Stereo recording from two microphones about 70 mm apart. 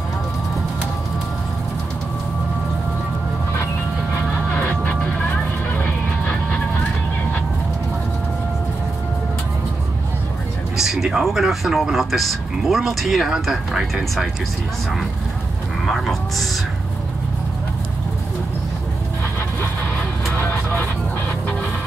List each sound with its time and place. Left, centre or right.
4.6 s music: left
10.8 s speech: centre
15.8 s vehicle: centre
20.3 s vehicle: left